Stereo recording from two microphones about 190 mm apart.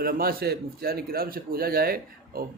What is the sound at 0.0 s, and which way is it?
A man's voice, 50° right (ahead or behind).